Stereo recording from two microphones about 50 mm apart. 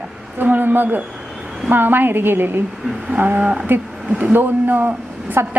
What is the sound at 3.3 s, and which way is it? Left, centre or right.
Speech, right.